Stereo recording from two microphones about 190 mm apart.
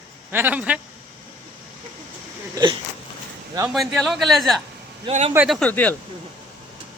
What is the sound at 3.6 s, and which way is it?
Speech, centre (ahead or behind).